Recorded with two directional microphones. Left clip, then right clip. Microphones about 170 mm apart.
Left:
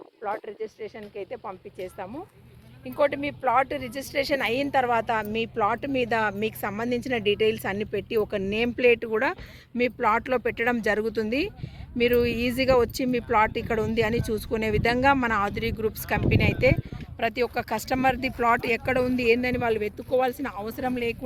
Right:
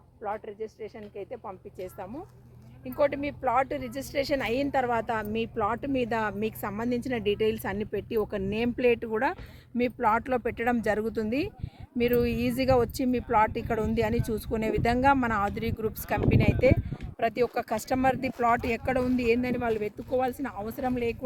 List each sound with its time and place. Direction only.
0.2 s speech: 10° left (ahead or behind)
3.0 s a woman's voice: 15° right (ahead or behind); by 21.2 s 85° right